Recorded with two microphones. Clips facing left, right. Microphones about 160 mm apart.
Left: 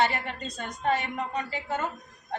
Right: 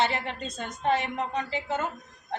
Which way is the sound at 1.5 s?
25° right (ahead or behind).